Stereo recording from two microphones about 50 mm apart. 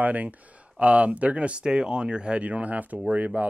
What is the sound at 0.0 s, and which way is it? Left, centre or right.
Speech, right.